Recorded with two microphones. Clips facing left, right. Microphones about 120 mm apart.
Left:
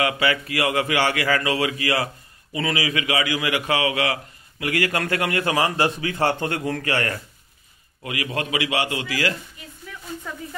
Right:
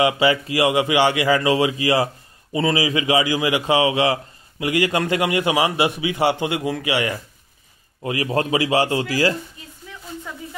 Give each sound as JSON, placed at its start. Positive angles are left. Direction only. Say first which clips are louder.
{"t": 0.0, "sound": "a man's voice", "louder": "right 5 dB", "side_deg": -25}
{"t": 8.0, "sound": "speech", "louder": "right 6 dB", "side_deg": -30}
{"t": 9.9, "sound": "a sound", "louder": "even", "side_deg": -25}